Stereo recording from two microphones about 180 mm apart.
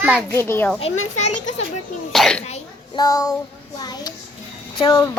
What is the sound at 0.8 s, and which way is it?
Speech, 40° left (ahead or behind).